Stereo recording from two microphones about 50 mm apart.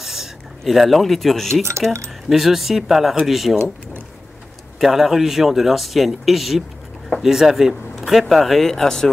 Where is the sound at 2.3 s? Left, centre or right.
Centre.